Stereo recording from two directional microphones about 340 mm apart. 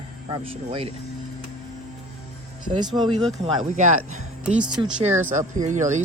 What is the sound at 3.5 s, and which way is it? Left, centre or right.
Speech, right.